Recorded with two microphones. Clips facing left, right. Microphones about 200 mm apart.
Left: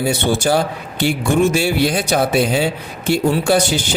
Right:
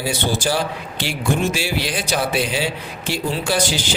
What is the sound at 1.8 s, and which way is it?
Speech, 50° left (ahead or behind).